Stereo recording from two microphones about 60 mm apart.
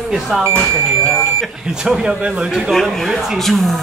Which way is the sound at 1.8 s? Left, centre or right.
Centre.